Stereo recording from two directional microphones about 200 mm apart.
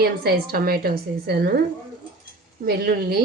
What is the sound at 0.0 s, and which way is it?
A woman's voice, 50° right (ahead or behind).